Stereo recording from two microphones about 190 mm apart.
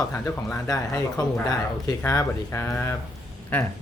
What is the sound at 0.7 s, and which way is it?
Speech, 20° left (ahead or behind).